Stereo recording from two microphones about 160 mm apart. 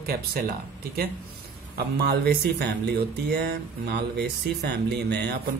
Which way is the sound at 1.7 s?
85° right.